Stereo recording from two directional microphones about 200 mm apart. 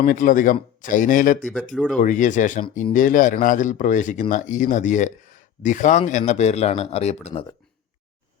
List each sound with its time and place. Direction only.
0.0 s speech: 40° left (ahead or behind)
1.7 s speech: 5° left (ahead or behind)
2.0 s speech: 40° left (ahead or behind)